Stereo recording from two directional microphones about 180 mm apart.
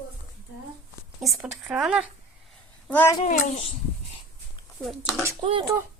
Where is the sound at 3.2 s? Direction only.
50° left (ahead or behind).